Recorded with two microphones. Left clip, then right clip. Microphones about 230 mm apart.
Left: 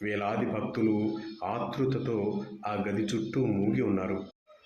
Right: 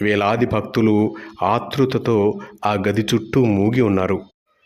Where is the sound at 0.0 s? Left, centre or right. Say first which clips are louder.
Right 13 dB; right.